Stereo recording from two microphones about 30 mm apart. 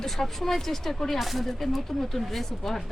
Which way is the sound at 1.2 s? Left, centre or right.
Centre.